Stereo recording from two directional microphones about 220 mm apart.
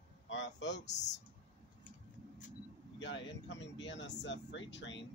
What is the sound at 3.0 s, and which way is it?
Speech, 55° left (ahead or behind).